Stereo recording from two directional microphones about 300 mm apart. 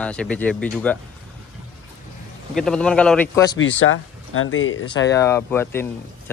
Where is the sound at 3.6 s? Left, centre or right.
Left.